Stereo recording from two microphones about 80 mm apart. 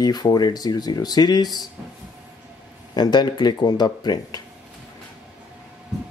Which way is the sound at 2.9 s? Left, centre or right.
Left.